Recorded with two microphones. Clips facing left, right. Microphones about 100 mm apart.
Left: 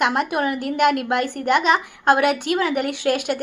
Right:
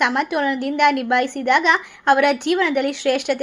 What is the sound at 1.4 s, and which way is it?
A woman's voice, 45° left (ahead or behind).